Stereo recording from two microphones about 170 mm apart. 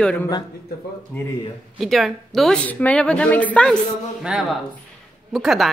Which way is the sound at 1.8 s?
Centre (ahead or behind).